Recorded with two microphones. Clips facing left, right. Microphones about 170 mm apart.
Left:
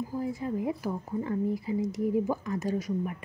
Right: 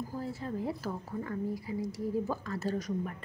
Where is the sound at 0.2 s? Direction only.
15° left (ahead or behind).